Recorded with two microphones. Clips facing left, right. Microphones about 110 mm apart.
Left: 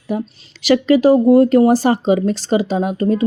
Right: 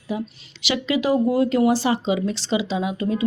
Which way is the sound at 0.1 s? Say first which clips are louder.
Left 5 dB; 55° left (ahead or behind).